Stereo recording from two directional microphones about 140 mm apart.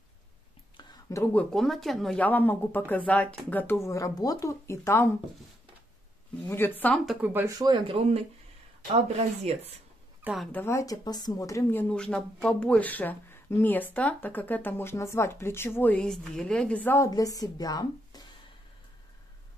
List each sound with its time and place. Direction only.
0.7 s a sound: 30° left (ahead or behind)
1.2 s speech: 10° left (ahead or behind)
6.4 s speech: 15° left (ahead or behind)
7.1 s speech: 10° right (ahead or behind)
7.4 s speech: 30° right (ahead or behind)
9.4 s speech: 50° right (ahead or behind)
10.2 s speech: centre (ahead or behind)
10.5 s speech: 20° left (ahead or behind)
17.1 s a woman's voice: 25° left (ahead or behind)